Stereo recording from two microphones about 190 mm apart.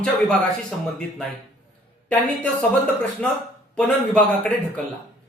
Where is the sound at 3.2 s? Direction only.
5° left (ahead or behind).